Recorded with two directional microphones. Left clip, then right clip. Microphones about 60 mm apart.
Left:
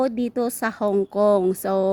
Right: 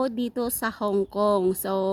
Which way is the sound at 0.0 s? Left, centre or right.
Left.